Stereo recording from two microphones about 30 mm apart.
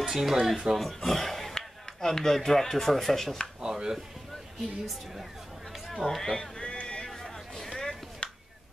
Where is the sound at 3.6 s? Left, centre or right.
Centre.